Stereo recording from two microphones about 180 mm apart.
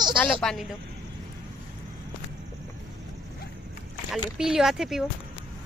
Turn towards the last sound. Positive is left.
turn(degrees=0)  # may be behind; listen again after turning